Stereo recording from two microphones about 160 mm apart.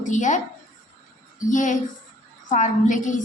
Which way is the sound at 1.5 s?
50° left (ahead or behind).